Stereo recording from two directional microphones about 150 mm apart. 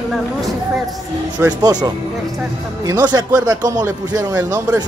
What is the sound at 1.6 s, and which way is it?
Speech, 25° right (ahead or behind).